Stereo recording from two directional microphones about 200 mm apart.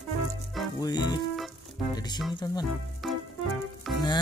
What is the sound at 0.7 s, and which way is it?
Music, 20° left (ahead or behind).